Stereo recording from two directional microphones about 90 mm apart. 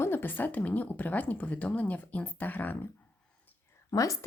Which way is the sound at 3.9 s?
40° left (ahead or behind).